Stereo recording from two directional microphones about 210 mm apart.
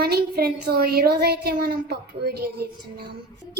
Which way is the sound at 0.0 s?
45° right (ahead or behind).